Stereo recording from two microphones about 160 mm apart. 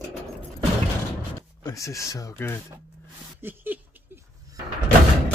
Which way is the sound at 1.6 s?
20° left (ahead or behind).